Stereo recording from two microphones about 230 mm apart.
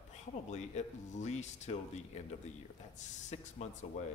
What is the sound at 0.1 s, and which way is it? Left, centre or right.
A man's voice, left.